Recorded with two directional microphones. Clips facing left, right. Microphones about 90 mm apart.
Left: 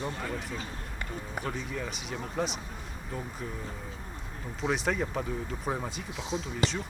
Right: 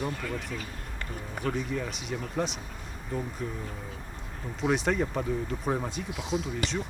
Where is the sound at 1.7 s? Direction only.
Centre (ahead or behind).